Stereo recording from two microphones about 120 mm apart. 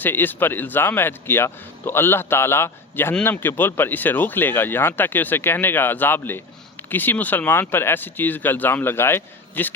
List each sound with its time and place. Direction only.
0.0 s a man's voice: 15° left (ahead or behind)